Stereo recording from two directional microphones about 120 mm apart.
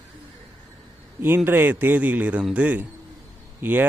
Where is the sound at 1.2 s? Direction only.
15° right (ahead or behind).